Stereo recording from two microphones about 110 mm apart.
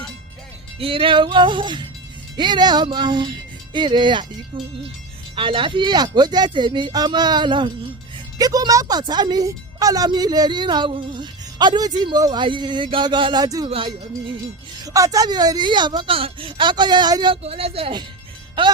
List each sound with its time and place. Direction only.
0.8 s speech: 55° right (ahead or behind)
8.4 s a woman's voice: 35° right (ahead or behind)
13.4 s a woman's voice: 35° right (ahead or behind)
13.7 s speech: 55° right (ahead or behind)
14.8 s a woman's voice: 30° right (ahead or behind)
16.1 s speech: 55° right (ahead or behind)
17.4 s speech: 65° right (ahead or behind)
18.6 s speech: 45° right (ahead or behind)